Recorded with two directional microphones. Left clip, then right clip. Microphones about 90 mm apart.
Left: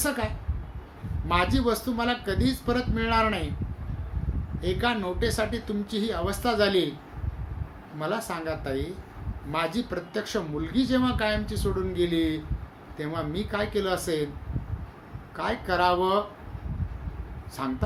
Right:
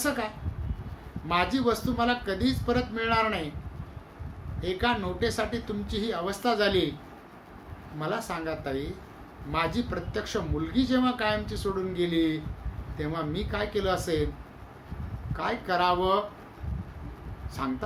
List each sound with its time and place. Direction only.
0.0 s speech: 25° left (ahead or behind)
1.3 s speech: 25° left (ahead or behind)
4.6 s speech: 25° left (ahead or behind)
7.9 s speech: 25° left (ahead or behind)
15.4 s speech: 30° left (ahead or behind)
17.6 s speech: 25° left (ahead or behind)